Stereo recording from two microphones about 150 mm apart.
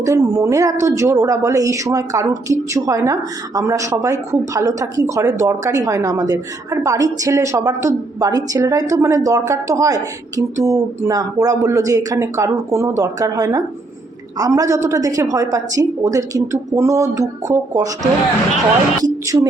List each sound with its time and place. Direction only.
0.0 s a woman's voice: 20° right (ahead or behind)
19.0 s speech: 20° right (ahead or behind)